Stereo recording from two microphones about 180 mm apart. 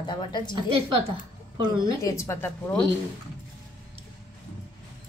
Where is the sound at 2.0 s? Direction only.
15° left (ahead or behind).